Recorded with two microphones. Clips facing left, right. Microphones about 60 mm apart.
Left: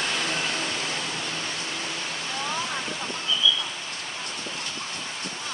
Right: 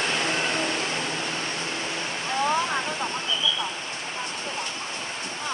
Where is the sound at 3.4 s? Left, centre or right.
Right.